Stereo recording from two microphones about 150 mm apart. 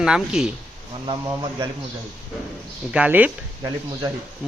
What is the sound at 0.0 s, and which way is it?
Speech, 5° right (ahead or behind).